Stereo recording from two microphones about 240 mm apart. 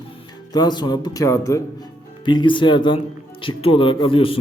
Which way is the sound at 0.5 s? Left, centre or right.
Centre.